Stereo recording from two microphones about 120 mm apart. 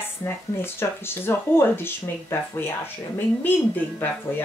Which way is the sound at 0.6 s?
20° left (ahead or behind).